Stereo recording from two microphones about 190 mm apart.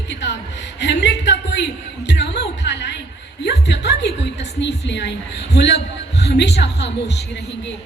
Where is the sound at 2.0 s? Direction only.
65° left (ahead or behind).